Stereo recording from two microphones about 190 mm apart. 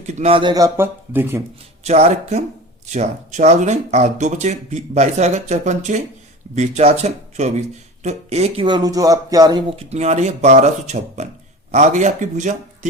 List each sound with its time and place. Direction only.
0.0 s speech: 35° right (ahead or behind); by 1.4 s 10° right (ahead or behind)
1.8 s speech: 35° right (ahead or behind)